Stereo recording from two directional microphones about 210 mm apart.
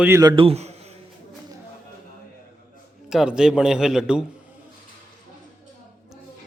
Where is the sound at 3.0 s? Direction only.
5° right (ahead or behind).